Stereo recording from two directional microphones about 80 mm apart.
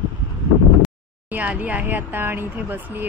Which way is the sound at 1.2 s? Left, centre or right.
Centre.